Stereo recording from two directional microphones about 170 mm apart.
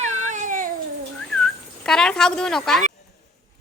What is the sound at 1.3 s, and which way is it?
Speech, 5° left (ahead or behind).